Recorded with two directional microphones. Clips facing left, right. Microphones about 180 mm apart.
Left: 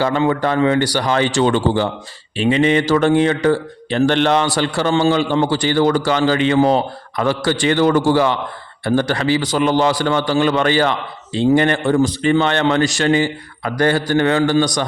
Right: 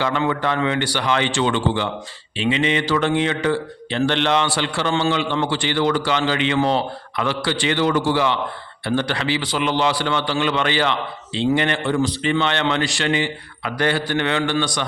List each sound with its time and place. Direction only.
0.0 s a man's voice: 35° left (ahead or behind)